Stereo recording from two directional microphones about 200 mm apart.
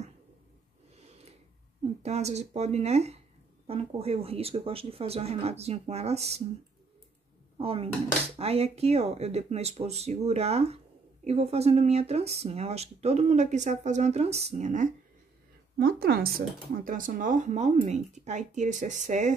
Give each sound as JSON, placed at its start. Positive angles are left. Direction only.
{"t": 2.0, "sound": "speech", "side_deg": -35}
{"t": 7.5, "sound": "speech", "side_deg": -30}
{"t": 15.8, "sound": "speech", "side_deg": -50}